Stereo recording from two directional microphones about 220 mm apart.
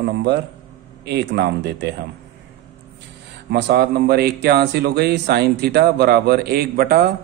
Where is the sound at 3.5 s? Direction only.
45° right (ahead or behind).